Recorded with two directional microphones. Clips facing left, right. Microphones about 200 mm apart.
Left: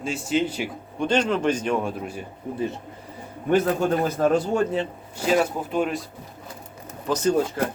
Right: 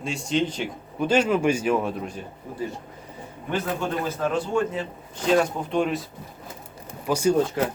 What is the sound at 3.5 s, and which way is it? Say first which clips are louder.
A man's voice: left 6 dB; 40° left (ahead or behind).